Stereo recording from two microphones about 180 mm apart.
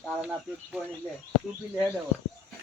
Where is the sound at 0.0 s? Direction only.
5° right (ahead or behind).